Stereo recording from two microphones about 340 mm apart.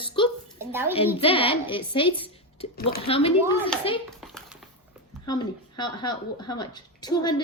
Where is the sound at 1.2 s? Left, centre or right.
Centre.